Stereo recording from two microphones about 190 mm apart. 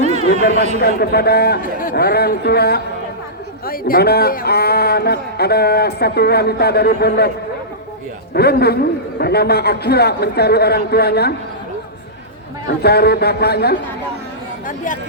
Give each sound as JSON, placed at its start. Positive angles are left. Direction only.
{"t": 0.0, "sound": "a sound", "side_deg": -35}
{"t": 0.5, "sound": "speech", "side_deg": -35}
{"t": 0.8, "sound": "a man's voice", "side_deg": 55}
{"t": 8.3, "sound": "a man's voice", "side_deg": 55}
{"t": 12.8, "sound": "a man's voice", "side_deg": 60}